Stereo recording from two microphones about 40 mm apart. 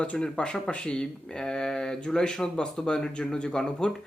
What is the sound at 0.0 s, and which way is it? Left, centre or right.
Speech, left.